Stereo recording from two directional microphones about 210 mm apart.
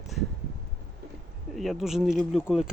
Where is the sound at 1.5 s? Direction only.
Centre (ahead or behind).